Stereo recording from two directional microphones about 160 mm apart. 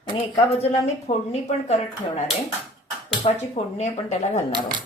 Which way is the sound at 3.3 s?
40° left (ahead or behind).